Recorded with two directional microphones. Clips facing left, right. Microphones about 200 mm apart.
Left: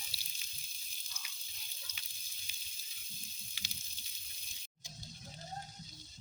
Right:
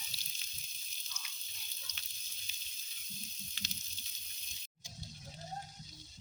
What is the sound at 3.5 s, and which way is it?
Frying, 10° left (ahead or behind).